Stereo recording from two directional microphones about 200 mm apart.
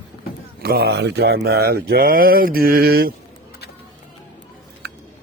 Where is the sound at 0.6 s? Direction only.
50° right (ahead or behind).